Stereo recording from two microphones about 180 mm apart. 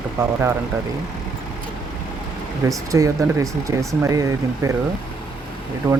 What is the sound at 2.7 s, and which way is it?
Speech, 15° right (ahead or behind).